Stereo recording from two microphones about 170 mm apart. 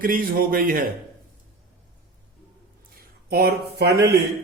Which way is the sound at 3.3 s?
70° right (ahead or behind).